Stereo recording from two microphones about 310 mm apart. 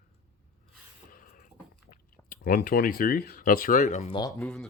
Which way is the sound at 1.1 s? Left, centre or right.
Left.